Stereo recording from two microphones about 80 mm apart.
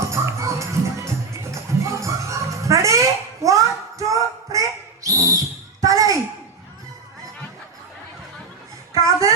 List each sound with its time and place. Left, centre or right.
0.0 s music: right
5.0 s owl: right
8.9 s a sound: right